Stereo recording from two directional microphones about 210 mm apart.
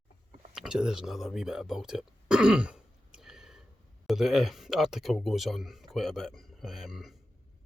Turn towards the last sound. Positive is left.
turn(degrees=0)  # may be behind; listen again after turning